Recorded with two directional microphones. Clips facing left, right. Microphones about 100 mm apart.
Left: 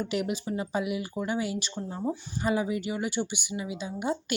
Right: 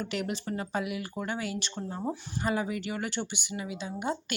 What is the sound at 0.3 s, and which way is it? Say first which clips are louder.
Speech: left 2 dB; 10° left (ahead or behind).